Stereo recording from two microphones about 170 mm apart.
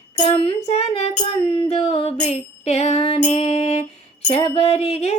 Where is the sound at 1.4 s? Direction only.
25° left (ahead or behind).